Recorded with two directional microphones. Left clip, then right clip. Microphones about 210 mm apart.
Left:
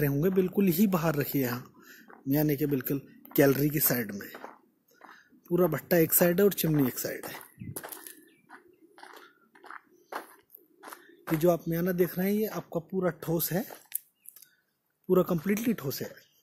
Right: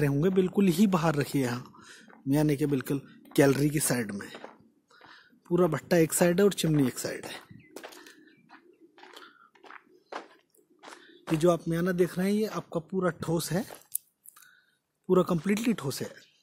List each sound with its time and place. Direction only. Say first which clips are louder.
0.0 s speech: right 1 dB; 5° right (ahead or behind)
7.7 s bird flight: left 1 dB; 15° left (ahead or behind)
8.5 s bird: left 4 dB; 10° left (ahead or behind)
9.6 s a sound: left 4 dB; 10° left (ahead or behind)
11.0 s speech: right 1 dB; centre (ahead or behind)
15.0 s speech: right 1 dB; centre (ahead or behind)